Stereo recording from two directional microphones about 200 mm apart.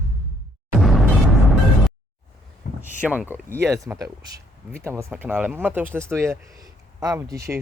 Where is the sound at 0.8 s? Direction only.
Centre (ahead or behind).